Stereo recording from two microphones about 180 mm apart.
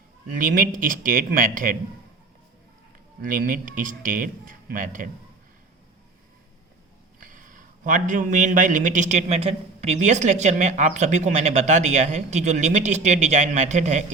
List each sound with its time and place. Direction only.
0.3 s speech: 50° right (ahead or behind)
3.2 s speech: 50° right (ahead or behind)
7.2 s a man's voice: 45° right (ahead or behind)